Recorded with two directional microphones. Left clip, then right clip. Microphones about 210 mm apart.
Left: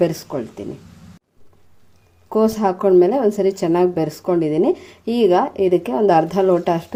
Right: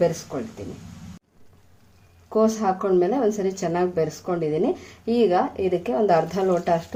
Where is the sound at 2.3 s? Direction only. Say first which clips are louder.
Left 3 dB; 35° left (ahead or behind).